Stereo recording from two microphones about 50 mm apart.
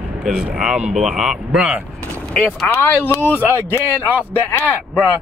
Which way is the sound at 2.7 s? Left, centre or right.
Left.